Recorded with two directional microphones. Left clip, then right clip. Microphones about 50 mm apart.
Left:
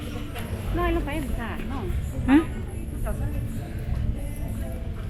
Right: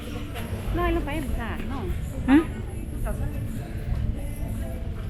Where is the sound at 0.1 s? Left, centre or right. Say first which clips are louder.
Even; centre.